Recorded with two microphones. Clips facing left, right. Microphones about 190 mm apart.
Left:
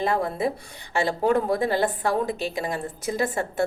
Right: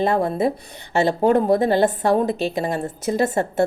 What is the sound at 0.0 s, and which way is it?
A woman's voice, 25° right (ahead or behind).